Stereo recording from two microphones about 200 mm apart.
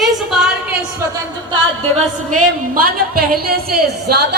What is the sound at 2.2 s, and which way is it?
A woman's voice, 40° right (ahead or behind).